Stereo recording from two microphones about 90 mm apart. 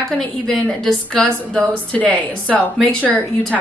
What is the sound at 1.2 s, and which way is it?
Speech, 15° left (ahead or behind).